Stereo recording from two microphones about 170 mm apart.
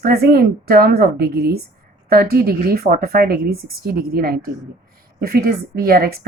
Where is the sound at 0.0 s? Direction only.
65° right (ahead or behind).